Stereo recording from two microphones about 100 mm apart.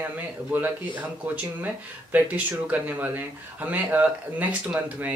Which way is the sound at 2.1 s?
15° right (ahead or behind).